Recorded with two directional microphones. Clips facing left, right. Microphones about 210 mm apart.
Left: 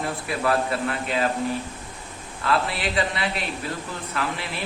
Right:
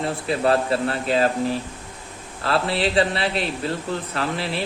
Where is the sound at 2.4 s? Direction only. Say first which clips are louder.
Right 3 dB; 30° right (ahead or behind).